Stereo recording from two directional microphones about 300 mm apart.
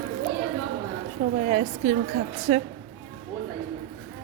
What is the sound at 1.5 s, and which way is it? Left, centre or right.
A woman's voice, right.